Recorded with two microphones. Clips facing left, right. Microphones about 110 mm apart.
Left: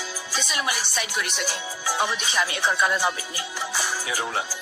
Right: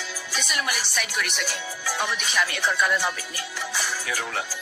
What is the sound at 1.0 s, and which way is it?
Speech, 25° left (ahead or behind).